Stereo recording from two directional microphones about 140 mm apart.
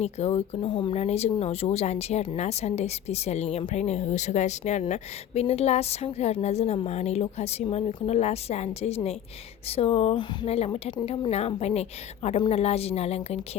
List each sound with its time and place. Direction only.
0.0 s speech: 50° left (ahead or behind)
0.6 s speech: 35° left (ahead or behind)
0.9 s speech: 50° left (ahead or behind)